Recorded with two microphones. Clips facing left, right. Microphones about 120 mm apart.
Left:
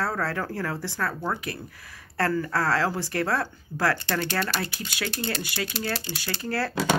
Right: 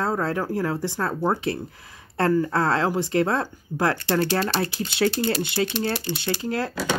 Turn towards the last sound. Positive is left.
turn(degrees=-20)  # may be behind; listen again after turning